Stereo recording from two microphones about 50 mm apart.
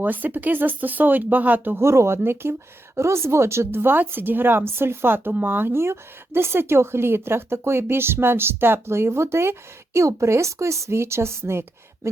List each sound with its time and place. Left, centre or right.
0.0 s speech: right
1.8 s a woman's voice: right